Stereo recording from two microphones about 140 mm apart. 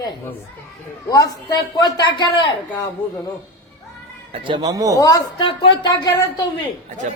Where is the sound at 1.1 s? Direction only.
25° left (ahead or behind).